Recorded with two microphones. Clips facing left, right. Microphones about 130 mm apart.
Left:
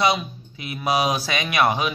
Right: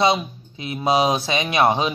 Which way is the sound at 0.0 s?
25° right (ahead or behind).